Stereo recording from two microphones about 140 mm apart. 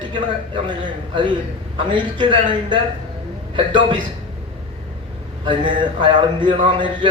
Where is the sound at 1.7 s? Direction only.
35° right (ahead or behind).